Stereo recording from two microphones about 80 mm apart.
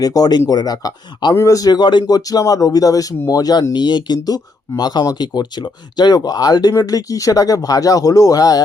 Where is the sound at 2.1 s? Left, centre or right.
Left.